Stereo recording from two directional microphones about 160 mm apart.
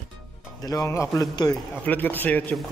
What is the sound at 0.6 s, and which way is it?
Speech, 20° left (ahead or behind).